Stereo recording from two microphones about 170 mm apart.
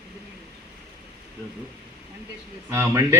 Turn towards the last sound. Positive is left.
turn(degrees=-15)  # may be behind; listen again after turning